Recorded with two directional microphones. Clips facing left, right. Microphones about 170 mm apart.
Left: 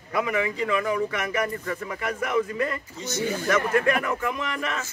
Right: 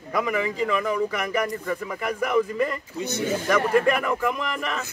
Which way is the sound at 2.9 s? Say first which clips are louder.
Right 3 dB; 60° right (ahead or behind).